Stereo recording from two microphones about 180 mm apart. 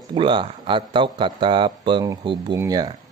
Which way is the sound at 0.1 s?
25° right (ahead or behind).